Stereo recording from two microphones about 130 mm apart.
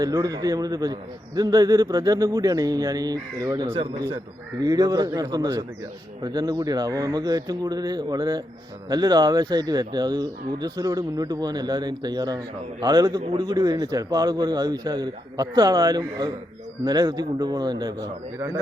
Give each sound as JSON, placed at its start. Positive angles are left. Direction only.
{"t": 0.0, "sound": "speech", "side_deg": -30}